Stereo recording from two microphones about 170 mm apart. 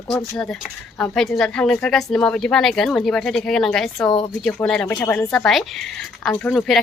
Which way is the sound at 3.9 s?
25° left (ahead or behind).